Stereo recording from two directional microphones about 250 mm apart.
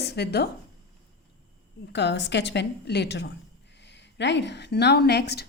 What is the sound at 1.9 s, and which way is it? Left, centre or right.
A woman's voice, left.